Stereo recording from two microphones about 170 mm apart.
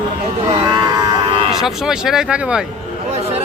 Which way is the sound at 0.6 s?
25° right (ahead or behind).